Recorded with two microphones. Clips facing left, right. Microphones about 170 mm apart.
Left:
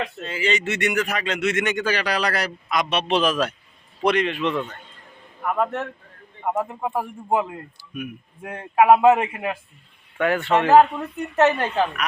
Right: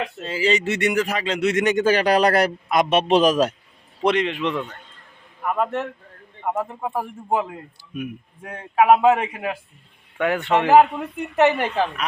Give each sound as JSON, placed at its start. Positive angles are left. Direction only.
{"t": 0.2, "sound": "speech", "side_deg": -30}
{"t": 4.0, "sound": "a man's voice", "side_deg": -20}
{"t": 6.6, "sound": "a man's voice", "side_deg": 5}
{"t": 7.8, "sound": "a man's voice", "side_deg": -25}
{"t": 8.4, "sound": "a man's voice", "side_deg": 10}
{"t": 10.2, "sound": "speech", "side_deg": -15}